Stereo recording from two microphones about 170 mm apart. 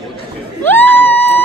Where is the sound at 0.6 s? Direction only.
10° left (ahead or behind).